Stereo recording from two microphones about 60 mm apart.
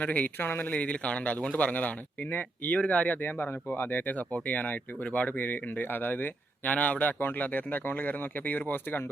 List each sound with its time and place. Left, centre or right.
0.0 s speech: left
0.7 s a man's voice: left